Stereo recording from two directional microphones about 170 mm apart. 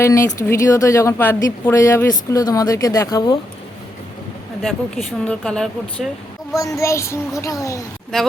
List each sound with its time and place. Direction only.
0.0 s speech: 20° left (ahead or behind)
4.6 s speech: 5° left (ahead or behind)
6.5 s speech: 20° left (ahead or behind)
8.1 s speech: centre (ahead or behind)